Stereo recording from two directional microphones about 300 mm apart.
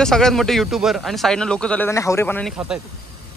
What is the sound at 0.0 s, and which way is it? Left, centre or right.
Speech, centre.